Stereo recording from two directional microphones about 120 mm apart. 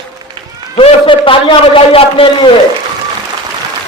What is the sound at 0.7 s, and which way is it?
Speech, 50° left (ahead or behind).